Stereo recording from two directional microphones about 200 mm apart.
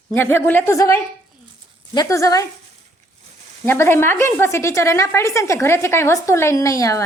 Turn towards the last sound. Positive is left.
turn(degrees=15)  # may be behind; listen again after turning